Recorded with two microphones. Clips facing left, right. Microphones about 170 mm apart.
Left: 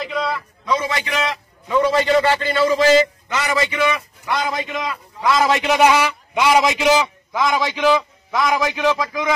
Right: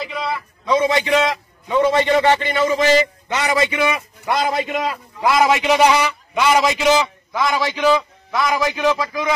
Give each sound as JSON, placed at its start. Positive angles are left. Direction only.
{"t": 0.0, "sound": "a sound", "side_deg": -5}
{"t": 0.7, "sound": "a man's voice", "side_deg": -25}
{"t": 3.3, "sound": "a man's voice", "side_deg": -30}
{"t": 4.6, "sound": "a man's voice", "side_deg": -35}
{"t": 5.5, "sound": "a man's voice", "side_deg": 0}
{"t": 8.4, "sound": "a man's voice", "side_deg": 0}
{"t": 8.9, "sound": "a man's voice", "side_deg": 15}